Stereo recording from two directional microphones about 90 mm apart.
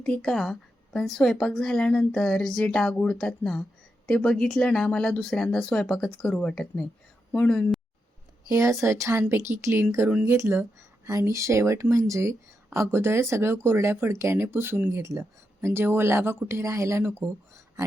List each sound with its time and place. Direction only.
0.0 s a woman's voice: 5° left (ahead or behind)
8.4 s speech: 35° right (ahead or behind)
9.2 s speech: 20° right (ahead or behind)